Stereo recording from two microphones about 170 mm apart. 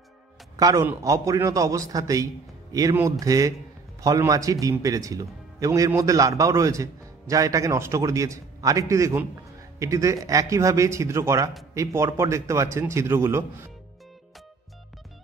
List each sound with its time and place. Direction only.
0.6 s a man's voice: 20° right (ahead or behind)